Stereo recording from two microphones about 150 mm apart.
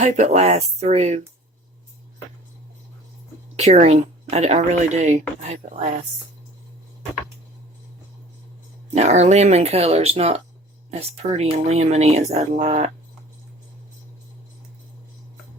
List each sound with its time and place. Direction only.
0.0 s speech: 50° right (ahead or behind)
3.5 s speech: 45° right (ahead or behind)
9.0 s speech: 45° right (ahead or behind)